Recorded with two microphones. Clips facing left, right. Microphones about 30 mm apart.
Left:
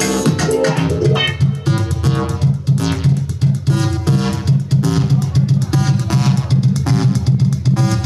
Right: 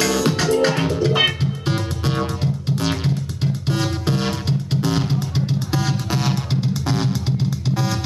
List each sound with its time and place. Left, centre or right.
0.0 s music: centre
3.6 s music: centre